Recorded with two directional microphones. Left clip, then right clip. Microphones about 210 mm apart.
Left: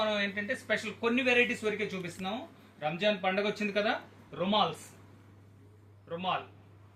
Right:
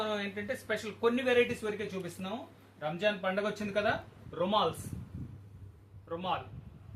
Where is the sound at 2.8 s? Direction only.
20° right (ahead or behind).